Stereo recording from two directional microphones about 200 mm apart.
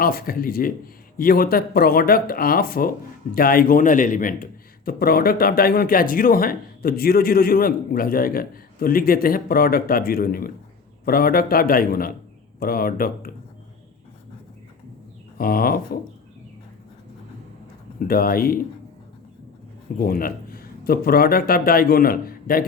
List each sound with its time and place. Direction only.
0.0 s speech: 45° left (ahead or behind)
15.4 s speech: 45° left (ahead or behind)
18.1 s speech: 45° left (ahead or behind)
20.0 s a man's voice: 45° left (ahead or behind)